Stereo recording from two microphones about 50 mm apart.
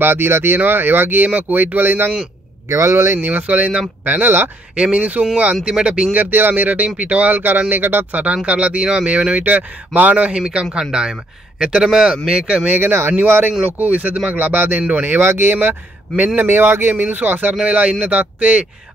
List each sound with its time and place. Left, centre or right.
0.0 s speech: right
2.7 s speech: right
3.3 s a man's voice: right
4.9 s a man's voice: right
6.1 s a man's voice: right
10.4 s a man's voice: centre
12.6 s speech: right
13.5 s a man's voice: right
14.3 s speech: right
15.2 s speech: right
16.3 s speech: right
17.6 s a man's voice: right